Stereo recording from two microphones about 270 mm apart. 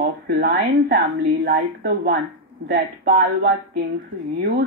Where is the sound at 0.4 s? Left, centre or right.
Right.